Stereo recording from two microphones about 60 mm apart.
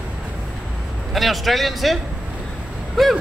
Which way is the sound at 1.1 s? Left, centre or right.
Centre.